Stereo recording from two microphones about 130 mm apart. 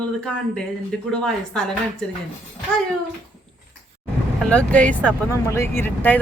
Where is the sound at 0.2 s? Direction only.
5° left (ahead or behind).